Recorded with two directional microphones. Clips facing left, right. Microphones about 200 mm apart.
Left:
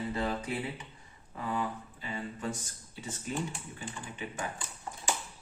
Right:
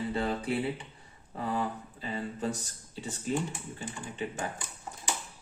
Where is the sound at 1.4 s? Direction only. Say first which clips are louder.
Right 2 dB; 35° right (ahead or behind).